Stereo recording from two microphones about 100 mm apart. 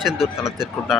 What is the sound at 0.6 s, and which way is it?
Speech, 5° right (ahead or behind).